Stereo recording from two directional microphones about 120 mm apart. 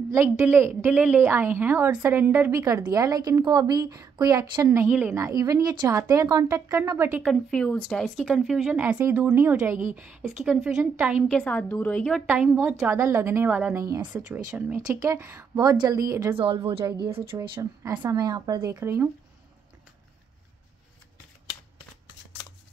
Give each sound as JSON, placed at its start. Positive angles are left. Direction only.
{"t": 0.4, "sound": "a woman's voice", "side_deg": -20}
{"t": 7.2, "sound": "a woman's voice", "side_deg": 5}
{"t": 11.2, "sound": "a woman's voice", "side_deg": 10}
{"t": 12.3, "sound": "a woman's voice", "side_deg": -15}
{"t": 13.7, "sound": "speech", "side_deg": -25}
{"t": 16.3, "sound": "a woman's voice", "side_deg": -50}
{"t": 17.4, "sound": "speech", "side_deg": -25}